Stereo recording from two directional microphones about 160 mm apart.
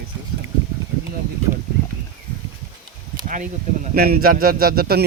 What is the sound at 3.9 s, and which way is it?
A man's voice, 70° right (ahead or behind).